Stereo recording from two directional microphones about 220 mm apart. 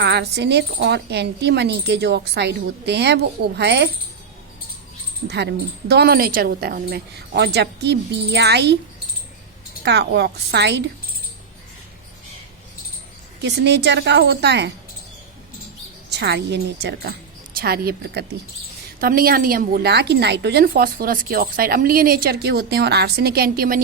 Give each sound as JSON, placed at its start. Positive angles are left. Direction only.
{"t": 0.0, "sound": "a woman's voice", "side_deg": -50}
{"t": 5.3, "sound": "a woman's voice", "side_deg": -50}
{"t": 9.8, "sound": "a woman's voice", "side_deg": -50}
{"t": 13.4, "sound": "a woman's voice", "side_deg": -50}
{"t": 16.0, "sound": "a woman's voice", "side_deg": -50}